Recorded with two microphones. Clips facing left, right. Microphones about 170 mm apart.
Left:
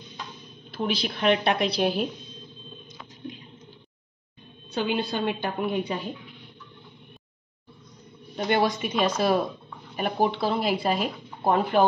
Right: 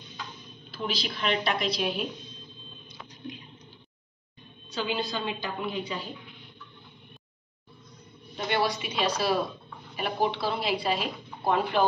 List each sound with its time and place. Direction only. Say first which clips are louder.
0.7 s a woman's voice: left 5 dB; 55° left (ahead or behind)
4.7 s a woman's voice: left 4 dB; 60° left (ahead or behind)
8.4 s speech: left 4 dB; 45° left (ahead or behind)